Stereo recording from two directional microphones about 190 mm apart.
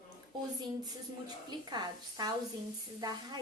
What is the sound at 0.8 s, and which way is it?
A woman's voice, 20° right (ahead or behind).